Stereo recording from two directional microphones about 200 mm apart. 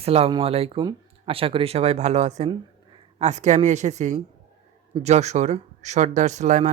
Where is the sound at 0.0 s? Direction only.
30° right (ahead or behind).